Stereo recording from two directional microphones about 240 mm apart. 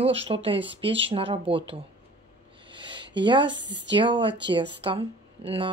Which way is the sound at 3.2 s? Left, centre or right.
Centre.